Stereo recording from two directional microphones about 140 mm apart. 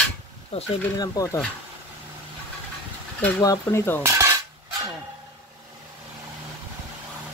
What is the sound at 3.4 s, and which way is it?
Cutlery, 20° left (ahead or behind).